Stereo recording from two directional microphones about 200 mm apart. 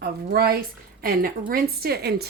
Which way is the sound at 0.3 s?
50° right (ahead or behind).